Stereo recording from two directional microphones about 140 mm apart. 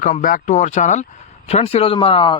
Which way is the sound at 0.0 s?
70° left (ahead or behind).